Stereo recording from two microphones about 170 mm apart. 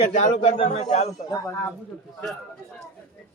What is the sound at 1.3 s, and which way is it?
Speech, 20° left (ahead or behind).